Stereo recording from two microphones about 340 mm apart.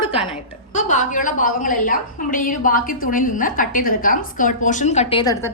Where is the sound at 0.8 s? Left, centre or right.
Left.